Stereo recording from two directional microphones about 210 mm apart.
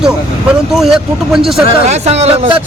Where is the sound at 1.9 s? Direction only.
30° right (ahead or behind).